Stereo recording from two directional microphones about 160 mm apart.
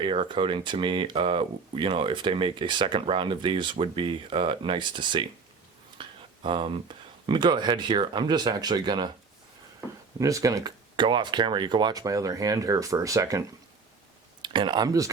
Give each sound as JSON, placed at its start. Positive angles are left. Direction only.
{"t": 0.0, "sound": "speech", "side_deg": -30}
{"t": 10.2, "sound": "speech", "side_deg": -20}
{"t": 14.4, "sound": "speech", "side_deg": -30}